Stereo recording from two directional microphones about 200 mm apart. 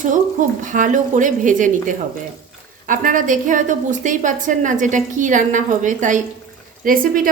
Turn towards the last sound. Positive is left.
turn(degrees=-45)  # may be behind; listen again after turning